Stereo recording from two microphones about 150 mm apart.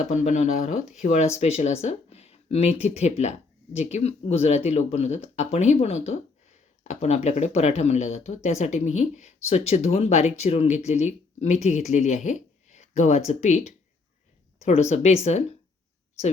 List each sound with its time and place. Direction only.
0.0 s speech: 50° left (ahead or behind)